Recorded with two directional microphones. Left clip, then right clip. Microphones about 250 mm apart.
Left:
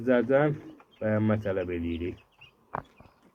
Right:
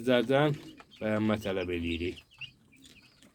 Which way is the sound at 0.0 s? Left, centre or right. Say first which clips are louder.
Left 2 dB; centre.